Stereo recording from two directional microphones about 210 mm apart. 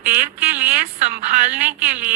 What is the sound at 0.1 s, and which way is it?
A woman's voice, 40° right (ahead or behind).